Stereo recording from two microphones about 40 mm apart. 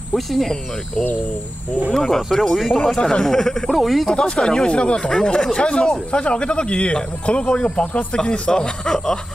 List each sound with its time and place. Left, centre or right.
0.1 s speech: centre
1.9 s speech: centre
3.0 s speech: left
3.7 s speech: centre
4.1 s speech: left